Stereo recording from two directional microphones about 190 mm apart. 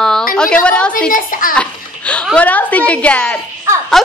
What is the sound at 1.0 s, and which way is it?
Speech, 45° left (ahead or behind).